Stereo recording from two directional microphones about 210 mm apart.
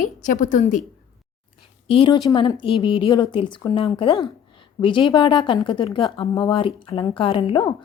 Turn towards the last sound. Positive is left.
turn(degrees=25)  # may be behind; listen again after turning